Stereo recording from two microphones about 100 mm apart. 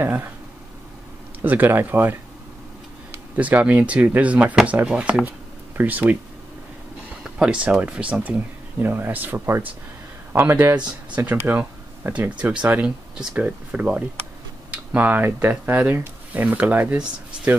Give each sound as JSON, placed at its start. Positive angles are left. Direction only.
{"t": 0.0, "sound": "speech", "side_deg": -20}
{"t": 1.4, "sound": "speech", "side_deg": -20}
{"t": 7.2, "sound": "speech", "side_deg": -10}